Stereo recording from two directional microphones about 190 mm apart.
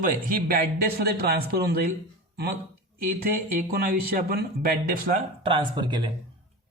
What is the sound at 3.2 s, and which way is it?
Speech, 50° right (ahead or behind).